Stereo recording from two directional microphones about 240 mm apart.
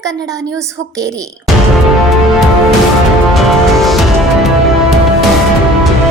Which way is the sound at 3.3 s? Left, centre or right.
Centre.